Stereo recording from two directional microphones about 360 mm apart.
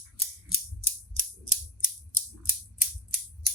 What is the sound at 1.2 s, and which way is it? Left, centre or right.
Scissors, right.